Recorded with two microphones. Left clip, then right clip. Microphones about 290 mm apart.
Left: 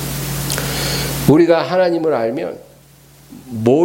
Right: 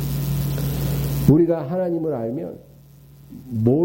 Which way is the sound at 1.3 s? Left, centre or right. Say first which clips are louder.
Left 7 dB; centre.